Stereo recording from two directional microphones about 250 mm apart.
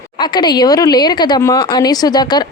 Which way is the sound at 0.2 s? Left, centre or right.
Centre.